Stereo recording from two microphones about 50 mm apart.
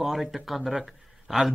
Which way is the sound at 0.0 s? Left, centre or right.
Centre.